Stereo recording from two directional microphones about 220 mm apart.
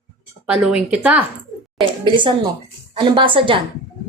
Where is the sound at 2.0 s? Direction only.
20° right (ahead or behind).